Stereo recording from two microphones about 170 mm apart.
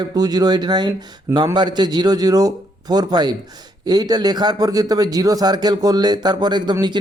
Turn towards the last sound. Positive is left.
turn(degrees=-25)  # may be behind; listen again after turning